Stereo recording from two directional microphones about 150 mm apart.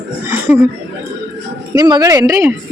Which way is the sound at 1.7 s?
25° right (ahead or behind).